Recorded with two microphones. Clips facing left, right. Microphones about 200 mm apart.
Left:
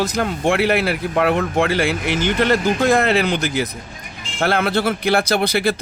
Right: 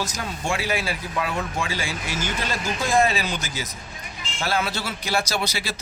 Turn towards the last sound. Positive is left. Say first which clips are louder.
# left 10 dB
turn(degrees=55)  # may be behind; listen again after turning